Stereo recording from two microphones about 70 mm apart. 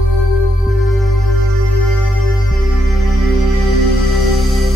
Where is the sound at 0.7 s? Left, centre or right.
Centre.